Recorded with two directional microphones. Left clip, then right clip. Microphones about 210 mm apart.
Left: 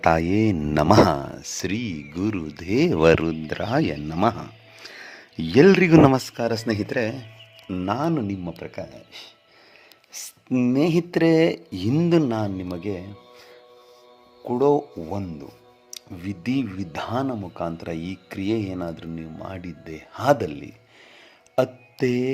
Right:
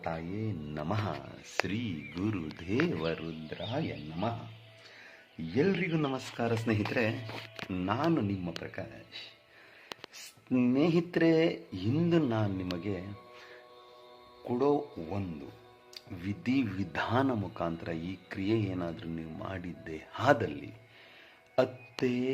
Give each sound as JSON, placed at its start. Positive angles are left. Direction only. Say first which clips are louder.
{"t": 0.0, "sound": "speech", "louder": "left 18 dB", "side_deg": 55}
{"t": 5.4, "sound": "speech", "louder": "left 15 dB", "side_deg": 60}
{"t": 10.5, "sound": "speech", "louder": "left 7 dB", "side_deg": 20}
{"t": 10.8, "sound": "speech", "louder": "left 8 dB", "side_deg": 30}
{"t": 14.4, "sound": "speech", "louder": "left 9 dB", "side_deg": 35}